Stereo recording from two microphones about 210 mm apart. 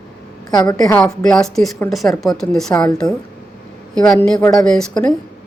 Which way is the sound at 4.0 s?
5° left (ahead or behind).